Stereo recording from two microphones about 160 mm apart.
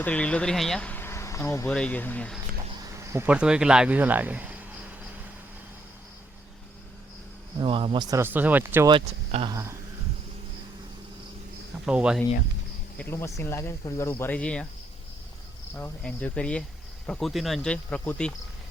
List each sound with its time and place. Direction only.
0.0 s speech: 10° left (ahead or behind)
2.9 s a sound: 15° right (ahead or behind)
3.2 s speech: 5° right (ahead or behind)
7.6 s speech: 35° right (ahead or behind)
8.1 s speech: 15° right (ahead or behind)
8.9 s speech: 35° right (ahead or behind)
11.9 s speech: 5° right (ahead or behind)
13.0 s speech: 15° left (ahead or behind)
15.7 s speech: 10° left (ahead or behind)